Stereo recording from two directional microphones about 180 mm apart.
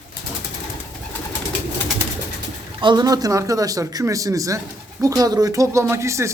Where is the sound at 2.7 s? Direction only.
25° right (ahead or behind).